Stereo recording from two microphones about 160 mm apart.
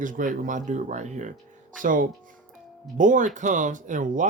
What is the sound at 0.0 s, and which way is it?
A man's voice, 55° right (ahead or behind).